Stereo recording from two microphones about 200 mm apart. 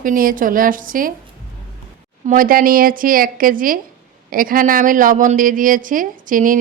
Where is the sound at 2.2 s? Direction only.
45° right (ahead or behind).